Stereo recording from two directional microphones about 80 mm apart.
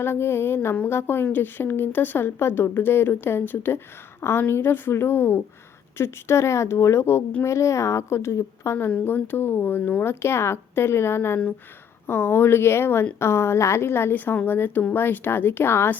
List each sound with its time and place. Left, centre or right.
0.0 s a woman's voice: left
8.9 s speech: left